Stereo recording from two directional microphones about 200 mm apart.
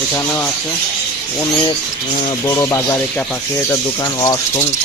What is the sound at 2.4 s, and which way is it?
Speech, 15° left (ahead or behind).